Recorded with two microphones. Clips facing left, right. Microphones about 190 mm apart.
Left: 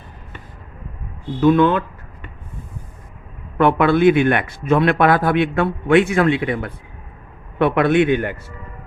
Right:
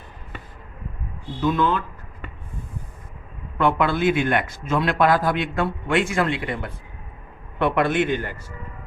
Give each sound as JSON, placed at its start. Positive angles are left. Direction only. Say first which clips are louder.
{"t": 1.4, "sound": "speech", "louder": "left 7 dB", "side_deg": 60}
{"t": 3.6, "sound": "speech", "louder": "left 6 dB", "side_deg": 60}